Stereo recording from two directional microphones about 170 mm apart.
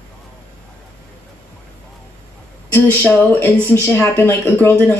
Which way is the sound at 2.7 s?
10° left (ahead or behind).